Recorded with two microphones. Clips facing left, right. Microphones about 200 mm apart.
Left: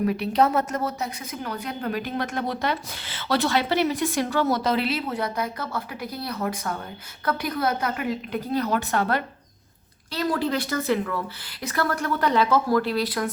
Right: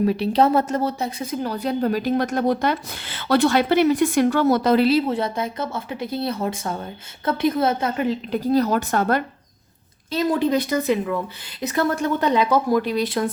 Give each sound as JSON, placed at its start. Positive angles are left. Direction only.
{"t": 0.0, "sound": "a woman's voice", "side_deg": -30}
{"t": 4.9, "sound": "a woman's voice", "side_deg": -30}
{"t": 10.1, "sound": "a woman's voice", "side_deg": -20}